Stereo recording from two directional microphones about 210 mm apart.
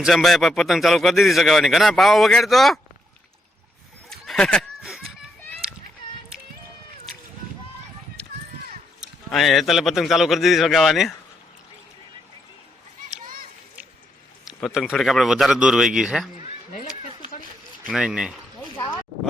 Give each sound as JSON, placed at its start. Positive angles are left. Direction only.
{"t": 0.0, "sound": "speech", "side_deg": 0}
{"t": 4.1, "sound": "snicker", "side_deg": 0}
{"t": 9.0, "sound": "speech", "side_deg": 0}
{"t": 13.1, "sound": "children playing", "side_deg": -40}
{"t": 14.4, "sound": "speech", "side_deg": 0}
{"t": 16.7, "sound": "a sound", "side_deg": 35}
{"t": 17.8, "sound": "speech", "side_deg": -5}